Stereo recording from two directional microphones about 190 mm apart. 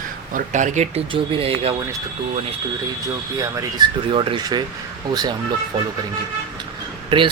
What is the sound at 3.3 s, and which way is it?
Speech, 15° right (ahead or behind).